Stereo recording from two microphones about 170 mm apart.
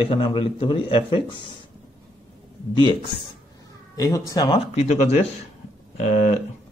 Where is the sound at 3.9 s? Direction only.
20° left (ahead or behind).